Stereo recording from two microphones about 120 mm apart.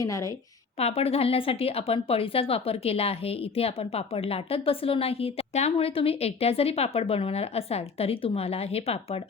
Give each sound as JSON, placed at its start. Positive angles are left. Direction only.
{"t": 0.0, "sound": "a woman's voice", "side_deg": 25}
{"t": 0.8, "sound": "speech", "side_deg": 55}